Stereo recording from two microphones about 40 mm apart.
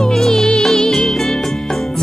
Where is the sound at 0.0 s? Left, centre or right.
Centre.